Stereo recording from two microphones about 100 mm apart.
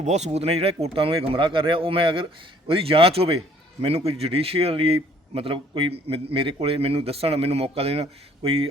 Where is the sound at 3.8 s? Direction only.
90° right.